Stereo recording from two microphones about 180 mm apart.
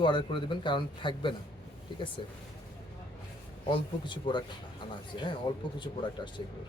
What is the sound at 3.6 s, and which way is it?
Speech, 25° left (ahead or behind).